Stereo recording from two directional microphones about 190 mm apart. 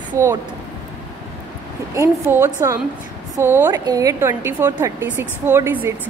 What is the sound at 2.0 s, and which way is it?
Speech, 10° right (ahead or behind).